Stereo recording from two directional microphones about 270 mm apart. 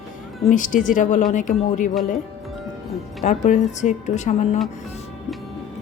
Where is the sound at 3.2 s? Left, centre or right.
Left.